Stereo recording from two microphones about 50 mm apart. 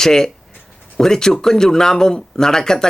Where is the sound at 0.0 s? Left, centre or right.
Centre.